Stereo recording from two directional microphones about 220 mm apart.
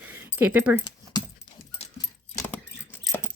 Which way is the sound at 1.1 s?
20° left (ahead or behind).